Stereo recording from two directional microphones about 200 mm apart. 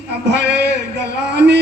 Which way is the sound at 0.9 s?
55° right (ahead or behind).